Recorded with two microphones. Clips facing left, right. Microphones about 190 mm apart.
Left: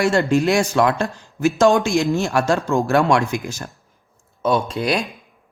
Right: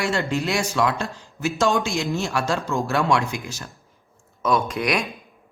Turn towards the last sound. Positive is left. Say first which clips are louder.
# left 2 dB
turn(degrees=30)  # may be behind; listen again after turning